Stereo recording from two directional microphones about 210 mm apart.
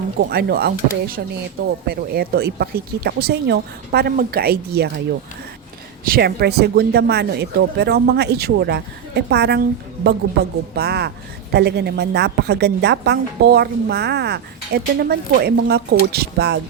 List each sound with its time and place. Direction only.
0.2 s a woman's voice: 50° right (ahead or behind)
6.1 s a woman's voice: 50° right (ahead or behind)